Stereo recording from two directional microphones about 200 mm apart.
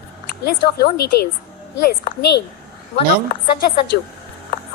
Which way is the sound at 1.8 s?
50° left (ahead or behind).